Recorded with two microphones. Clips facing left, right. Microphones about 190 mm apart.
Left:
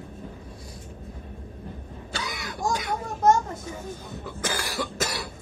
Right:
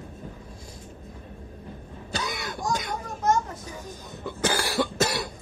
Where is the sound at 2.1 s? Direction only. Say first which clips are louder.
Right 2 dB; 45° right (ahead or behind).